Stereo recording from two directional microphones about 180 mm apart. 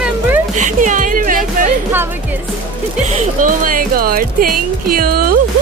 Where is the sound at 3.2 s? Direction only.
45° right (ahead or behind).